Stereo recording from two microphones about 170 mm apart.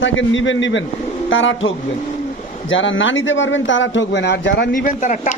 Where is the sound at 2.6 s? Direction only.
90° left.